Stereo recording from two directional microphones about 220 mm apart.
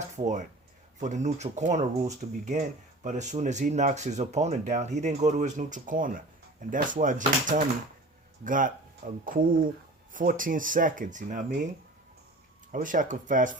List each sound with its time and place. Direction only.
0.2 s speech: 35° right (ahead or behind)
12.7 s speech: 35° right (ahead or behind)